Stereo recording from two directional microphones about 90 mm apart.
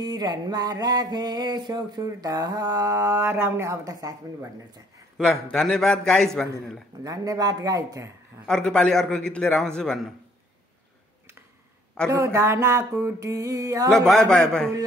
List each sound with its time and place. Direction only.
0.1 s a sound: 50° right (ahead or behind)
2.0 s speech: 45° right (ahead or behind)
5.1 s a man's voice: centre (ahead or behind)
7.0 s speech: 40° right (ahead or behind)
8.5 s a man's voice: 5° left (ahead or behind)
12.1 s speech: 35° right (ahead or behind)
13.8 s a man's voice: 5° left (ahead or behind)